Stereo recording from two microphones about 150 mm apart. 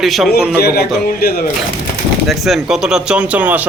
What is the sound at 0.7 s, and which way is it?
Speech, 90° left.